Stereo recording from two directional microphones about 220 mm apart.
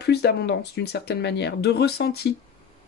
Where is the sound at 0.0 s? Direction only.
45° left (ahead or behind).